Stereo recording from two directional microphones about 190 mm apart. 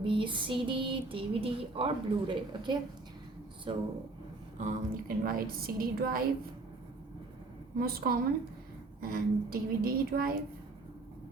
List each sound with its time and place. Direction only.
0.0 s speech: 25° right (ahead or behind)
4.6 s a woman's voice: 50° right (ahead or behind)
7.8 s a woman's voice: 50° right (ahead or behind)